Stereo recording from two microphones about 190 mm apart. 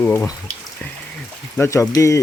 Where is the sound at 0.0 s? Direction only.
10° left (ahead or behind).